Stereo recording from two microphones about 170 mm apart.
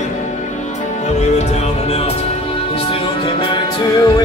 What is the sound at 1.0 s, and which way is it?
Music, 40° left (ahead or behind).